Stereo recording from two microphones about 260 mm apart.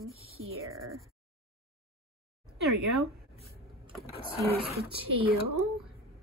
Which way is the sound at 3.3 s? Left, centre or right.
Right.